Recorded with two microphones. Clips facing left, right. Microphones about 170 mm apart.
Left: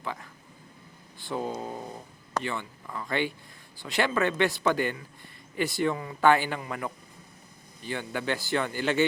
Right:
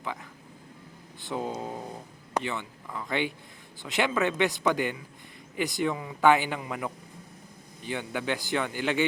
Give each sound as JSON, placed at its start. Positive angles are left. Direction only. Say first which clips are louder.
{"t": 0.0, "sound": "speech", "louder": "even", "side_deg": -15}
{"t": 2.4, "sound": "speech", "louder": "even", "side_deg": -20}